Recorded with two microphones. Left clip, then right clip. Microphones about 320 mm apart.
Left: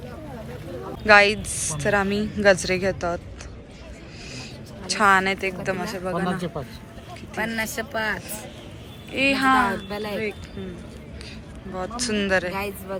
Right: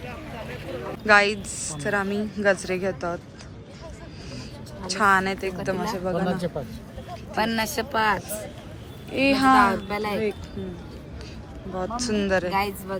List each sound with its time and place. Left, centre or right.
1.0 s a woman's voice: centre
4.9 s a woman's voice: centre
7.3 s a woman's voice: centre
11.7 s speech: centre